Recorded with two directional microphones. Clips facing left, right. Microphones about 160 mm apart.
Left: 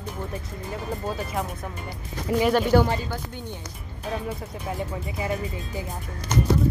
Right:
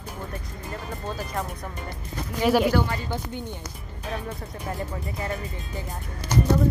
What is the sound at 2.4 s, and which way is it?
Speech, 5° right (ahead or behind).